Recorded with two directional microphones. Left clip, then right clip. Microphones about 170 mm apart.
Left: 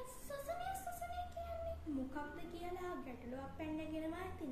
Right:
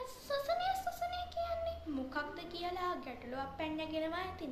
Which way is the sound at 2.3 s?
20° left (ahead or behind).